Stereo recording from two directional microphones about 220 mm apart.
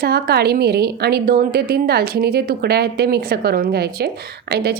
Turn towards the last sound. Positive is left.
turn(degrees=-45)  # may be behind; listen again after turning